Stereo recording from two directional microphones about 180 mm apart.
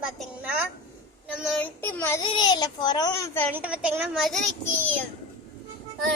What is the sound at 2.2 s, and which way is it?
A child's voice, 25° left (ahead or behind).